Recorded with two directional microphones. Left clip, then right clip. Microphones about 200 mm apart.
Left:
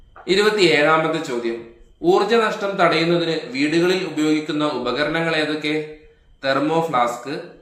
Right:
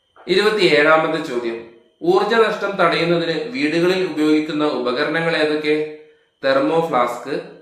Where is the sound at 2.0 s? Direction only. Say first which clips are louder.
Right 1 dB; 45° left (ahead or behind).